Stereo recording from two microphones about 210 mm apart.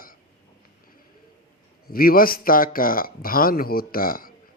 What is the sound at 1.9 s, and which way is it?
A man's voice, 45° left (ahead or behind).